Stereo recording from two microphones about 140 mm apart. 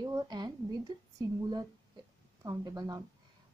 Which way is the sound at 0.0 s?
30° right (ahead or behind).